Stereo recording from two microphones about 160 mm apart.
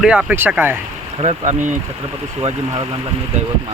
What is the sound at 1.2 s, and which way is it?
Speech, 45° right (ahead or behind).